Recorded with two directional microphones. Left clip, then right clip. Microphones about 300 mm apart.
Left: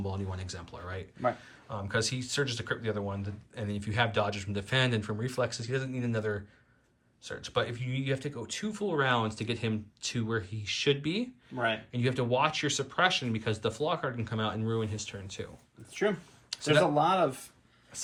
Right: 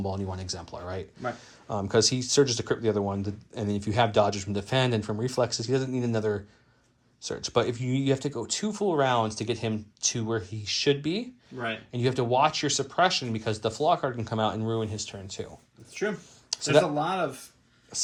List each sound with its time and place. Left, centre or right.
0.0 s speech: centre
16.5 s a sound: centre
17.0 s speech: left
17.9 s speech: centre